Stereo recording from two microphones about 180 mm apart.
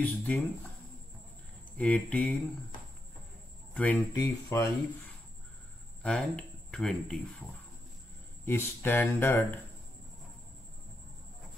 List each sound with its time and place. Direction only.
0.0 s speech: 10° left (ahead or behind)
1.8 s speech: 5° left (ahead or behind)
3.7 s speech: 10° left (ahead or behind)
6.0 s speech: 5° left (ahead or behind)
8.5 s speech: 15° left (ahead or behind)